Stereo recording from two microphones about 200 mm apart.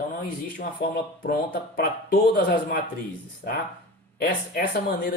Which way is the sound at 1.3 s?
45° left (ahead or behind).